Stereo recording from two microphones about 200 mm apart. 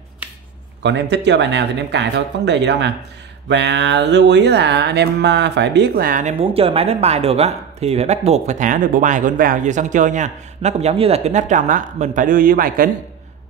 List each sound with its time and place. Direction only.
0.2 s finger snapping: 10° right (ahead or behind)
0.8 s speech: 60° right (ahead or behind)
3.4 s mantra: 60° right (ahead or behind); by 12.9 s 45° right (ahead or behind)